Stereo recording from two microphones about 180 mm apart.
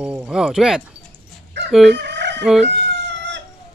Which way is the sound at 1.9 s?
70° right (ahead or behind).